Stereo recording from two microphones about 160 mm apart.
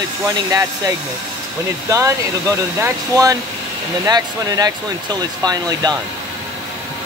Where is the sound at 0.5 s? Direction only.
20° right (ahead or behind).